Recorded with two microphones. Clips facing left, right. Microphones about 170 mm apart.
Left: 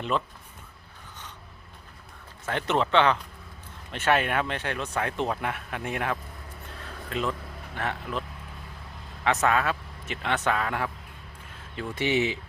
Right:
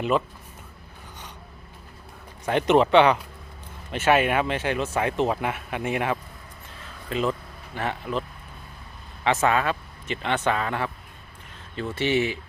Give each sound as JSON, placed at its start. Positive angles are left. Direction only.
{"t": 2.5, "sound": "speech", "side_deg": -15}
{"t": 3.9, "sound": "a man's voice", "side_deg": -5}
{"t": 9.2, "sound": "a man's voice", "side_deg": 0}
{"t": 11.8, "sound": "speech", "side_deg": 15}